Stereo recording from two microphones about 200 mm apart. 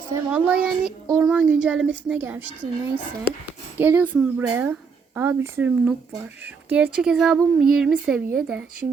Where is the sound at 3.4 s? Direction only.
10° right (ahead or behind).